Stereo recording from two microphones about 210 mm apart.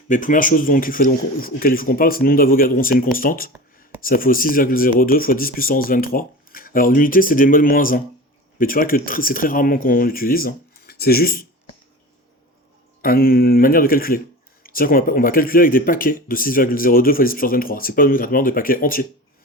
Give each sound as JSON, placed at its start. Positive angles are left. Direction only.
{"t": 0.1, "sound": "speech", "side_deg": 40}
{"t": 13.0, "sound": "speech", "side_deg": 45}